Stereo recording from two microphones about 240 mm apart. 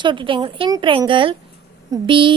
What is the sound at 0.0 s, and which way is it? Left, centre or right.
A woman's voice, centre.